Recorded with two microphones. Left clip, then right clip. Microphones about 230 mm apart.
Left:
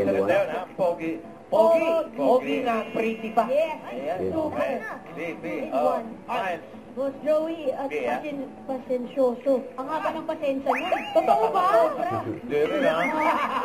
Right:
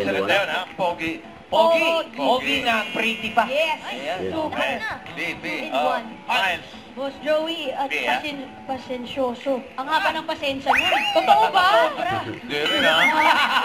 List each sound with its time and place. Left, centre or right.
0.0 s a man's voice: centre